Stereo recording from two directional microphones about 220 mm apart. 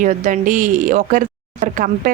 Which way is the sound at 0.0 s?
35° right (ahead or behind).